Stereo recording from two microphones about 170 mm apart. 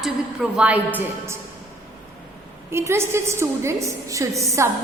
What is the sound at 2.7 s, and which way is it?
A woman's voice, 15° right (ahead or behind).